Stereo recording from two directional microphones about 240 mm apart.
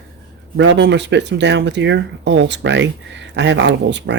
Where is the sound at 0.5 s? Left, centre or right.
Right.